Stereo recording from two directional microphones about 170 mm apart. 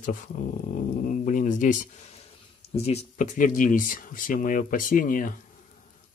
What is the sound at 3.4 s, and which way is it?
Speech, 50° left (ahead or behind).